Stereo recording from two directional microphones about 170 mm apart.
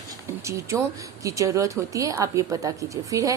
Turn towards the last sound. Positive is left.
turn(degrees=-20)  # may be behind; listen again after turning